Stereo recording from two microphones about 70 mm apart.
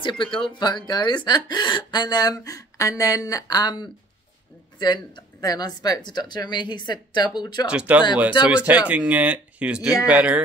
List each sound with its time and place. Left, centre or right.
0.6 s speech: left
7.6 s speech: centre